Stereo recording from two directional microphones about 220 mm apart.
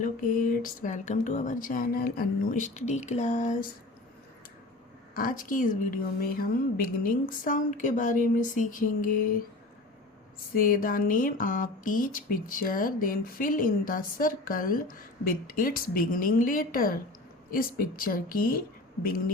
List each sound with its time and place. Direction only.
0.0 s speech: 40° left (ahead or behind)
5.1 s speech: 40° left (ahead or behind)
10.5 s speech: 40° left (ahead or behind)